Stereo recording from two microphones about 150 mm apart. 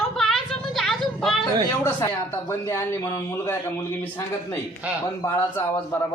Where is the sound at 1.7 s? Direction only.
20° left (ahead or behind).